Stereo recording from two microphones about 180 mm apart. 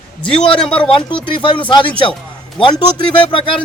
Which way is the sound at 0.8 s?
30° left (ahead or behind).